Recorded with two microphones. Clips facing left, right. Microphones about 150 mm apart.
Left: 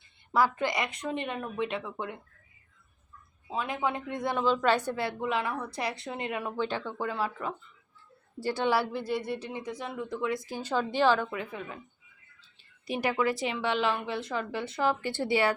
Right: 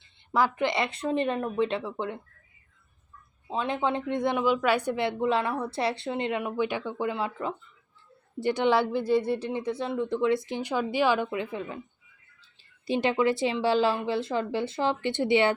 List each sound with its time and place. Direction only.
0.3 s speech: 20° right (ahead or behind)
3.5 s speech: 25° right (ahead or behind); by 4.8 s 10° right (ahead or behind)
4.9 s speech: 20° right (ahead or behind)
12.9 s speech: 25° right (ahead or behind)